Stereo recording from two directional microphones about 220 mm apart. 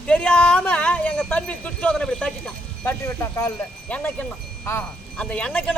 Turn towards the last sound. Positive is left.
turn(degrees=5)  # may be behind; listen again after turning